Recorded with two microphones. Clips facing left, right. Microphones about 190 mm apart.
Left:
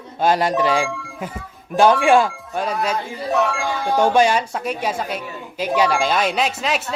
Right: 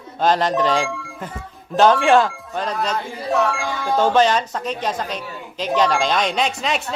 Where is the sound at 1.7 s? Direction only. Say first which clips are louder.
Even; 5° left (ahead or behind).